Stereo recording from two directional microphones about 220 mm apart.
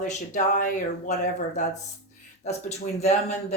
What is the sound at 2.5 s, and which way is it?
Speech, 30° left (ahead or behind).